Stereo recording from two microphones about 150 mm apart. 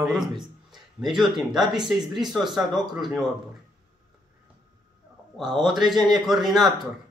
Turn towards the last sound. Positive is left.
turn(degrees=0)  # may be behind; listen again after turning